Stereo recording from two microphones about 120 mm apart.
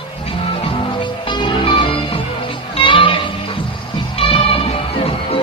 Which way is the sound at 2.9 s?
45° left (ahead or behind).